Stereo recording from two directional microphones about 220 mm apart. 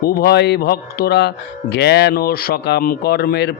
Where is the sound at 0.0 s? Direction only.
45° left (ahead or behind).